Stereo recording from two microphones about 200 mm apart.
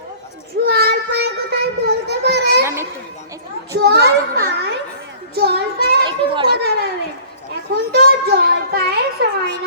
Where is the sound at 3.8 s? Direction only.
55° right (ahead or behind).